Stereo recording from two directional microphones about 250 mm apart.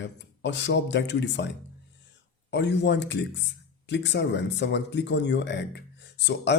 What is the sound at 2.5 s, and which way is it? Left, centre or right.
Speech, left.